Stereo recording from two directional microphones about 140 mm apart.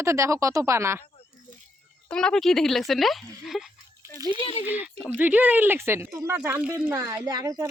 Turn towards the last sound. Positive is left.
turn(degrees=-25)  # may be behind; listen again after turning